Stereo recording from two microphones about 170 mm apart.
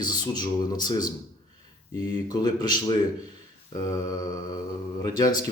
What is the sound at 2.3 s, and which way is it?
Speech, 25° left (ahead or behind).